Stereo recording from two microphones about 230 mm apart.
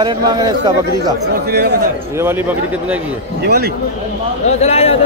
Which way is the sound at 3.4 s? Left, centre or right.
Right.